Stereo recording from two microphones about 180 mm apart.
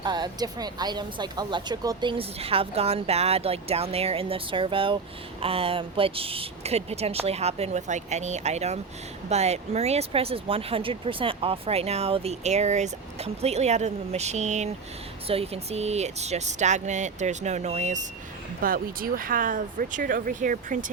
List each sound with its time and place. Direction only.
0.0 s speech: 25° right (ahead or behind); by 18.0 s 40° right (ahead or behind)
18.6 s speech: 55° right (ahead or behind)